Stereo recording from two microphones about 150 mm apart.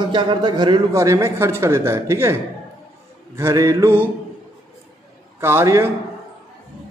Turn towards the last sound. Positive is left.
turn(degrees=-15)  # may be behind; listen again after turning